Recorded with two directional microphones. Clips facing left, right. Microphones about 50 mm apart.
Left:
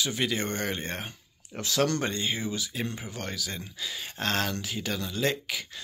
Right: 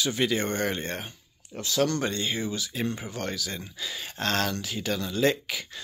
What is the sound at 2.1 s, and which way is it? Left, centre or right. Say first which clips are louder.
Speech: right 1 dB; centre.